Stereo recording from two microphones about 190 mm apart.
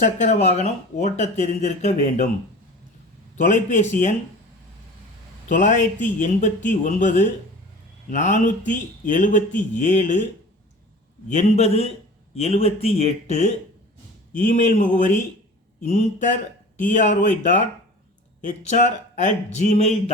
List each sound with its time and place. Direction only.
0.0 s speech: 40° left (ahead or behind)
3.4 s speech: 40° left (ahead or behind)
5.5 s speech: 40° left (ahead or behind)
11.3 s speech: 35° left (ahead or behind)